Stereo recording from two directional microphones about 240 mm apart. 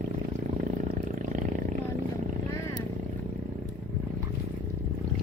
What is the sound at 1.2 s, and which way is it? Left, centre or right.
Roar, right.